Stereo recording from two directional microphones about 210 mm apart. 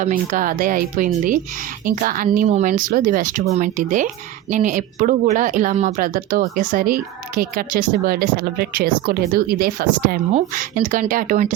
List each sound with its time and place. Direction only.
0.0 s speech: 40° right (ahead or behind)